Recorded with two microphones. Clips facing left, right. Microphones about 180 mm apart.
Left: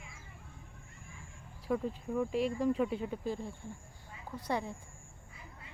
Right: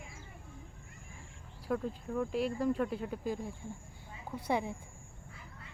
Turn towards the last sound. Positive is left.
turn(degrees=-15)  # may be behind; listen again after turning